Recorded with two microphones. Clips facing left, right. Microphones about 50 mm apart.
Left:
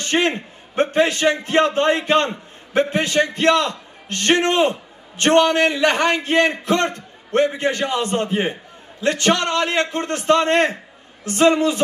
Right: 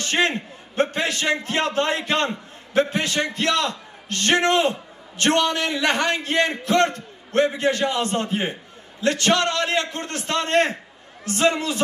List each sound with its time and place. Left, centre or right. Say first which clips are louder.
0.0 s a man's voice: left 2 dB; left